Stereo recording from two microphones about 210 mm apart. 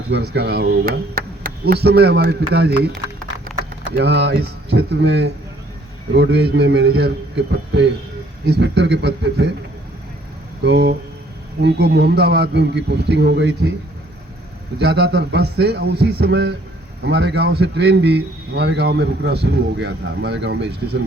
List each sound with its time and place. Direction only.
0.1 s a man's voice: 50° right (ahead or behind)
3.9 s a man's voice: 55° right (ahead or behind)
10.6 s a man's voice: 55° right (ahead or behind)
14.8 s a man's voice: 55° right (ahead or behind)